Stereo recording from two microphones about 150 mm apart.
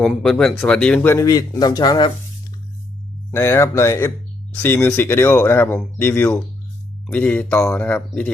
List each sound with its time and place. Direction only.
0.0 s speech: 5° left (ahead or behind)
1.1 s speech: 25° left (ahead or behind)
3.3 s speech: 15° left (ahead or behind)